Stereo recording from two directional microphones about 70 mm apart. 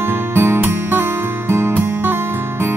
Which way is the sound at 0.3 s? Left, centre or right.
Right.